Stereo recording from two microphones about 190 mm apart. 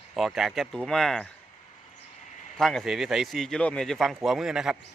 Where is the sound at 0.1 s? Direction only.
Centre (ahead or behind).